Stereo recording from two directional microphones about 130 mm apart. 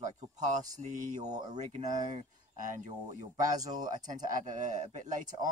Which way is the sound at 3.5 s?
30° right (ahead or behind).